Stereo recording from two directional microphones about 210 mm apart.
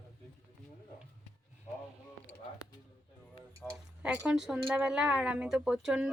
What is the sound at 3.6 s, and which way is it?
A woman's voice, 5° right (ahead or behind).